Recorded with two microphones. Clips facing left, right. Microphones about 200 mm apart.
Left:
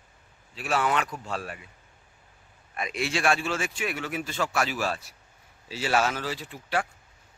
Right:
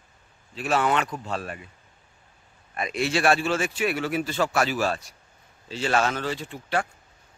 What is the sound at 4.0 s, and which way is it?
Speech, 35° right (ahead or behind).